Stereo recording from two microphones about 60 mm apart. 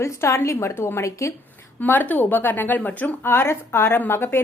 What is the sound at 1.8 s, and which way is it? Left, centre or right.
Speech, left.